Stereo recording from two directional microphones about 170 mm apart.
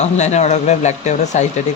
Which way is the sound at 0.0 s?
40° left (ahead or behind).